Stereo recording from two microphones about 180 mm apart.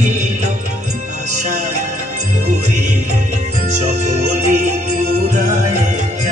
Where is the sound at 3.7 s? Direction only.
40° right (ahead or behind).